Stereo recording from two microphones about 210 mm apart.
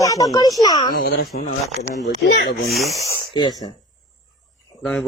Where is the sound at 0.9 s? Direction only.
45° left (ahead or behind).